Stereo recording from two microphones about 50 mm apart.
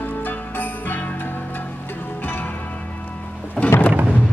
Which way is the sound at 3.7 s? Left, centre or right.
Left.